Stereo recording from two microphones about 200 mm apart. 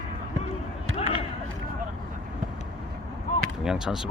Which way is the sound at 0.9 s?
30° left (ahead or behind).